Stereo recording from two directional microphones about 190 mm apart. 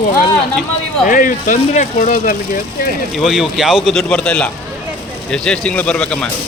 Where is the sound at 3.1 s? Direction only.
Centre (ahead or behind).